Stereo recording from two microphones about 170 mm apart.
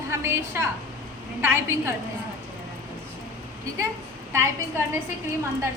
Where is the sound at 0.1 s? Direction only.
15° right (ahead or behind).